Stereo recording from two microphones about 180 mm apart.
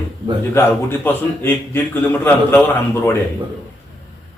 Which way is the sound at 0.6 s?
15° left (ahead or behind).